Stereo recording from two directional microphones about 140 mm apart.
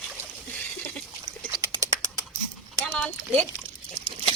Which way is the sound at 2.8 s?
5° left (ahead or behind).